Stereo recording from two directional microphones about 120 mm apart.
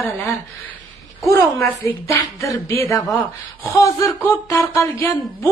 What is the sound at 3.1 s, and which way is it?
Speech, 15° left (ahead or behind).